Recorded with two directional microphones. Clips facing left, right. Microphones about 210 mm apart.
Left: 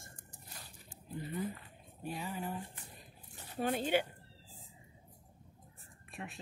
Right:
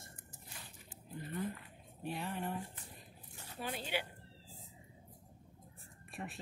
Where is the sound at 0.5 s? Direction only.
40° left (ahead or behind).